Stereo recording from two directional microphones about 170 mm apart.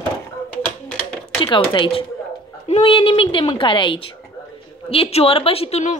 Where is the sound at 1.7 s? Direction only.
30° left (ahead or behind).